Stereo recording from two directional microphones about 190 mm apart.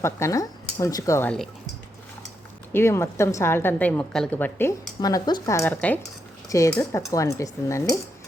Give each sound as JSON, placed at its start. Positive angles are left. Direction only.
{"t": 0.0, "sound": "a woman's voice", "side_deg": 15}
{"t": 2.7, "sound": "a woman's voice", "side_deg": 15}